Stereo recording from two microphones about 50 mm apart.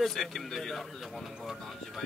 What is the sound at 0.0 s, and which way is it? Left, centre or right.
A man's voice, centre.